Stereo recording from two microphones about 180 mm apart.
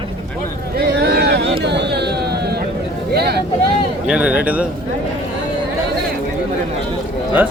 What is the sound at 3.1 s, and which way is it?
Speech, 60° right (ahead or behind).